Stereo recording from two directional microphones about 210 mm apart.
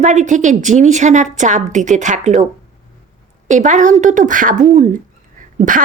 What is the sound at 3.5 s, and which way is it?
A woman's voice, 35° right (ahead or behind).